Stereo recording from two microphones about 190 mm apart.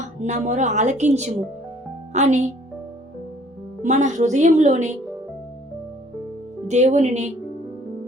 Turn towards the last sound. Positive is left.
turn(degrees=-35)  # may be behind; listen again after turning